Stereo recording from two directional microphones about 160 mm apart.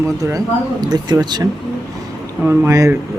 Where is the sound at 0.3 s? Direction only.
20° right (ahead or behind).